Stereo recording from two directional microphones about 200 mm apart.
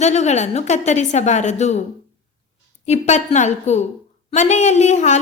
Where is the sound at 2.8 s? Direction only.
35° left (ahead or behind).